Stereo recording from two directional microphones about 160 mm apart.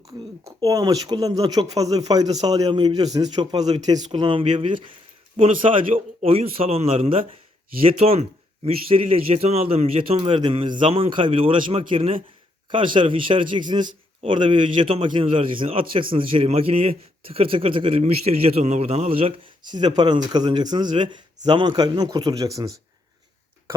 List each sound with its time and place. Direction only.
0.4 s a man's voice: 20° right (ahead or behind); by 19.3 s 40° right (ahead or behind)
19.8 s speech: 25° right (ahead or behind)